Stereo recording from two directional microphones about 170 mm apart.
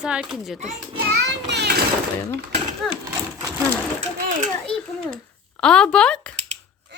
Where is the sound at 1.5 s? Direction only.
80° right.